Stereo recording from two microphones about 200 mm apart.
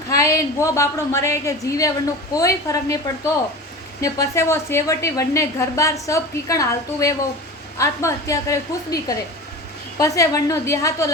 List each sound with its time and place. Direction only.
0.1 s a woman's voice: 15° left (ahead or behind)
4.0 s a woman's voice: 15° left (ahead or behind)